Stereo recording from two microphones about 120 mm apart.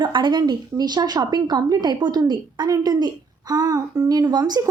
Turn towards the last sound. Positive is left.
turn(degrees=-35)  # may be behind; listen again after turning